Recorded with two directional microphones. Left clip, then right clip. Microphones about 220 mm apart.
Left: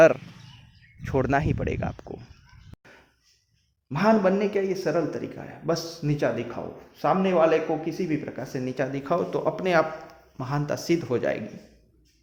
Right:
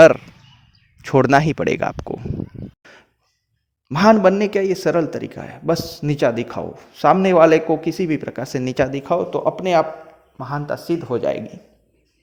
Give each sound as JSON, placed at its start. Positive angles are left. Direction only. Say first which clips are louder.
{"t": 1.0, "sound": "a man's voice", "louder": "right 10 dB", "side_deg": -40}
{"t": 2.8, "sound": "a sound", "louder": "right 7 dB", "side_deg": -40}
{"t": 3.8, "sound": "a man's voice", "louder": "right 8 dB", "side_deg": -40}
{"t": 10.3, "sound": "speech", "louder": "right 4 dB", "side_deg": -5}
{"t": 11.1, "sound": "speech", "louder": "right 5 dB", "side_deg": -25}